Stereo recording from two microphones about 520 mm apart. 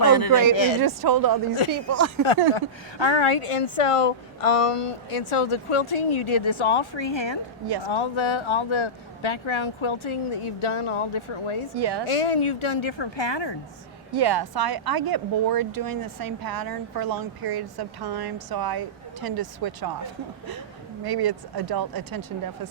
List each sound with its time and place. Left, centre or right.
0.0 s speech: left
0.5 s speech: left
0.8 s speech: right
1.7 s speech: right
2.6 s speech: left
11.7 s speech: right
12.0 s speech: left
14.1 s speech: right
21.0 s speech: right